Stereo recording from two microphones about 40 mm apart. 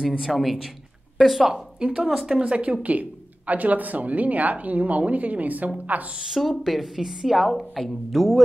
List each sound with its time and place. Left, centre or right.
0.2 s a woman's voice: centre
1.8 s speech: centre
2.4 s speech: right
6.2 s a woman's voice: centre